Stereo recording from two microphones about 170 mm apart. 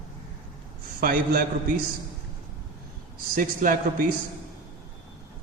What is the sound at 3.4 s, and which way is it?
Speech, 55° right (ahead or behind).